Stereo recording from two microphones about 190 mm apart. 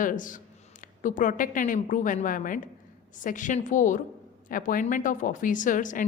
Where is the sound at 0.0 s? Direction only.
45° left (ahead or behind).